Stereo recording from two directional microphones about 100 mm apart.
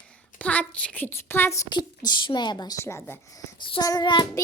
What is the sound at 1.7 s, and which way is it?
A woman's voice, 45° left (ahead or behind).